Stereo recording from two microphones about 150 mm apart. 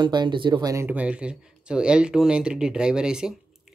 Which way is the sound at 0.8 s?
10° right (ahead or behind).